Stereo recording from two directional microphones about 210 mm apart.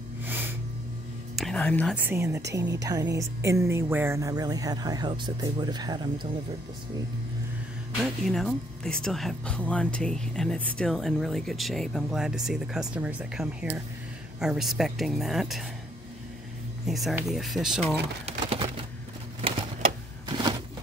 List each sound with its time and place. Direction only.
0.2 s snort: 10° right (ahead or behind)
1.3 s music: centre (ahead or behind)
2.0 s speech: 15° right (ahead or behind)
8.0 s speech: centre (ahead or behind)
16.8 s speech: centre (ahead or behind)
18.2 s pigeon: 25° right (ahead or behind)
20.2 s a sound: 20° right (ahead or behind)